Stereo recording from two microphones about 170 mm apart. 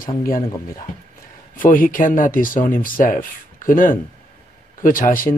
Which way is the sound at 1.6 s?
55° left (ahead or behind).